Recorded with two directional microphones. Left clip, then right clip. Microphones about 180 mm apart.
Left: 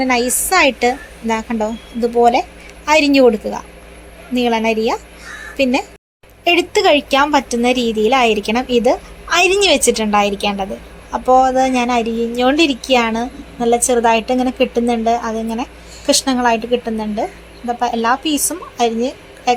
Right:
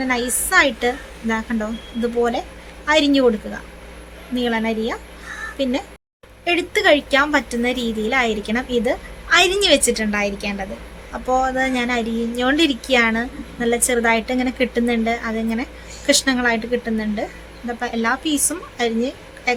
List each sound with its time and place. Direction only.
0.0 s speech: 20° left (ahead or behind)
6.4 s a woman's voice: 20° left (ahead or behind)